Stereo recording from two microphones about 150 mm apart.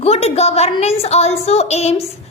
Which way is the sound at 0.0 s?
45° left (ahead or behind).